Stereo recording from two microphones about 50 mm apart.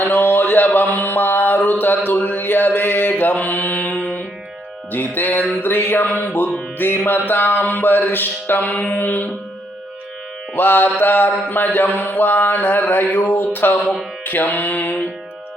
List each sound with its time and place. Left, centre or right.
0.0 s a sound: left
4.9 s music: left
5.5 s mantra: left
8.7 s music: left
10.5 s mantra: left
14.3 s music: left